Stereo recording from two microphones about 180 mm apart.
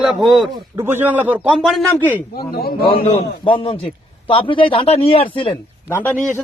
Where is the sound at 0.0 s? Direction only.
Centre (ahead or behind).